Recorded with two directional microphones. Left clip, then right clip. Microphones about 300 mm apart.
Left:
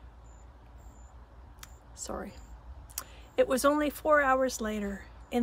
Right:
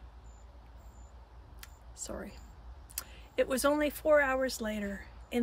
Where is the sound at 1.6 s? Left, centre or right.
Centre.